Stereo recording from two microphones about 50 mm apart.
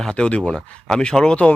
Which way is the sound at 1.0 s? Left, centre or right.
Centre.